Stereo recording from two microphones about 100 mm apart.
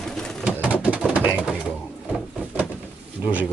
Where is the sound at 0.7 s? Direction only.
15° right (ahead or behind).